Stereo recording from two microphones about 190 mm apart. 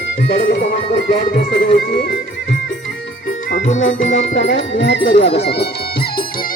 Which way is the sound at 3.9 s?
75° left (ahead or behind).